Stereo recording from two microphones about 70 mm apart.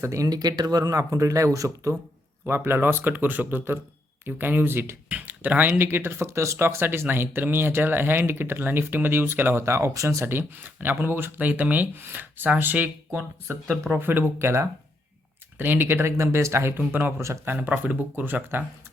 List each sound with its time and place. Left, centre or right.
0.0 s speech: right
0.3 s speech: right
2.5 s speech: right
5.0 s speech: right
13.9 s speech: right
15.5 s speech: right
16.1 s speech: right
16.9 s speech: right
17.2 s speech: right
17.6 s speech: right